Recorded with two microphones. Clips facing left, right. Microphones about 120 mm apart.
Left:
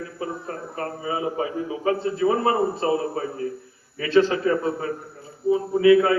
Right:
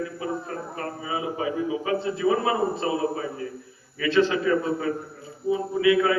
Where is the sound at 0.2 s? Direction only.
35° left (ahead or behind).